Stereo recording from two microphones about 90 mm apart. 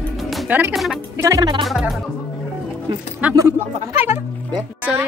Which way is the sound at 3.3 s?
30° right (ahead or behind).